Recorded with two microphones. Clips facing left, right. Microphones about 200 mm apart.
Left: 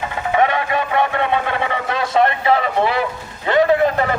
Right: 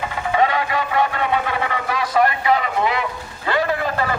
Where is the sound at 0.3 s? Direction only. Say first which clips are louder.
Left 2 dB; 25° left (ahead or behind).